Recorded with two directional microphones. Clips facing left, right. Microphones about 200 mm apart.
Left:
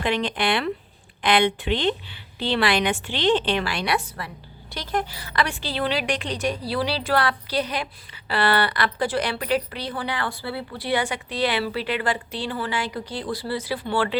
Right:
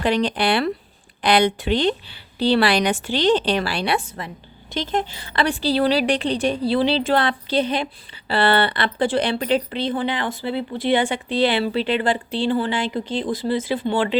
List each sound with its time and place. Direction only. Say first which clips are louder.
0.0 s a woman's voice: right 4 dB; 35° right (ahead or behind); by 14.2 s 20° right (ahead or behind)